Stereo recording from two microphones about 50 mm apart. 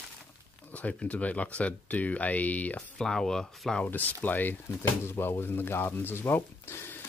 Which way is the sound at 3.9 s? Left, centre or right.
Left.